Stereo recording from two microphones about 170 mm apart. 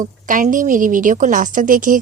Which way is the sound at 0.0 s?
50° right (ahead or behind).